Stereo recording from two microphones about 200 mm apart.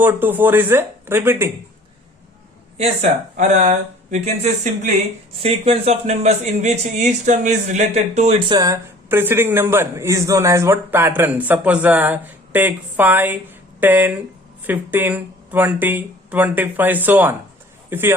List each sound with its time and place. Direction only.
0.0 s a man's voice: 10° right (ahead or behind)
2.7 s speech: 35° right (ahead or behind)
5.4 s speech: 30° right (ahead or behind)
8.4 s a man's voice: 20° right (ahead or behind)